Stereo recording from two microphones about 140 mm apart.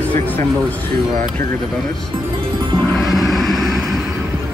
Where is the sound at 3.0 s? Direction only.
Centre (ahead or behind).